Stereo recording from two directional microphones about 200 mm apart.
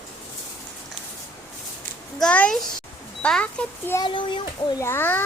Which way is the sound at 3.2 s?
5° left (ahead or behind).